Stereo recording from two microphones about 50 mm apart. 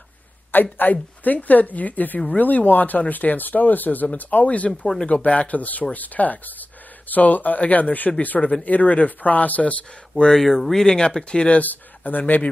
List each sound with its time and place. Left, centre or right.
0.5 s speech: left
4.6 s speech: centre
5.0 s speech: left
10.2 s speech: centre
11.6 s speech: left